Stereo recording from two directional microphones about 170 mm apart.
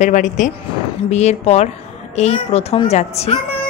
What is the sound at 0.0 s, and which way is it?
A woman's voice, 45° left (ahead or behind).